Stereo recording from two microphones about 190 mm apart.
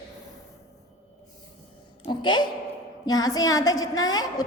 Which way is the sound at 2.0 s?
25° left (ahead or behind).